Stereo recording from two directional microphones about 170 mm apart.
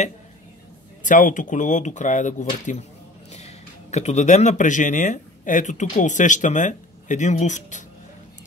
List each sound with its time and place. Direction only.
1.0 s speech: 50° left (ahead or behind)